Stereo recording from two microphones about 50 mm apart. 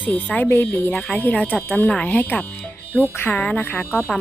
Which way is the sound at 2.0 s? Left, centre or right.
Left.